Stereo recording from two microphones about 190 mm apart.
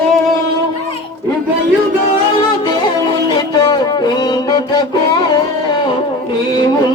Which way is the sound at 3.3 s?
20° left (ahead or behind).